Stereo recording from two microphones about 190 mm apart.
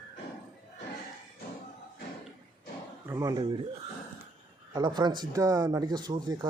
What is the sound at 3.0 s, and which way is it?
Speech, 15° right (ahead or behind).